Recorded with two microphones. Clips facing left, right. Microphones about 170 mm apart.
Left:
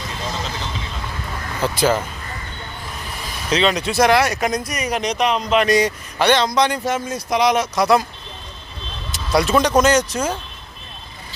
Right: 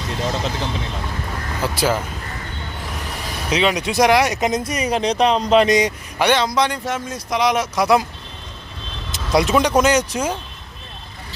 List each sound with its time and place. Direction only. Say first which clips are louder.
0.3 s speech: right 4 dB; 60° right (ahead or behind)
1.6 s speech: left 2 dB; 5° right (ahead or behind)
3.0 s vehicle: right 2 dB; 70° right (ahead or behind)
3.5 s speech: left 1 dB; 10° right (ahead or behind); by 5.6 s 35° right (ahead or behind)
5.6 s speech: even; 15° right (ahead or behind)
9.1 s speech: even; 20° right (ahead or behind)